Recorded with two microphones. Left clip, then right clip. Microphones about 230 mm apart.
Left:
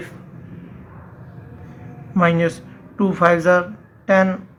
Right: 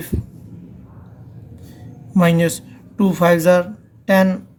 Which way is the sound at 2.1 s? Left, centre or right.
Right.